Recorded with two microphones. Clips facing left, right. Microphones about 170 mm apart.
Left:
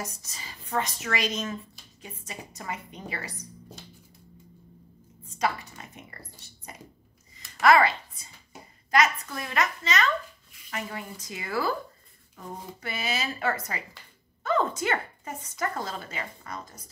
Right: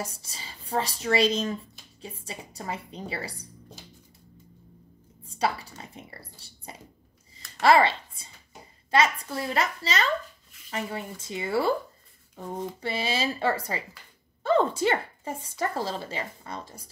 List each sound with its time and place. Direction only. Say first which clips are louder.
0.0 s speech: right 2 dB; 30° right (ahead or behind)
5.2 s speech: right 1 dB; 30° right (ahead or behind)